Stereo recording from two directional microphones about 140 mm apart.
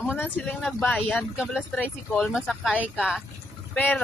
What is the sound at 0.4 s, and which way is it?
Speech, centre (ahead or behind).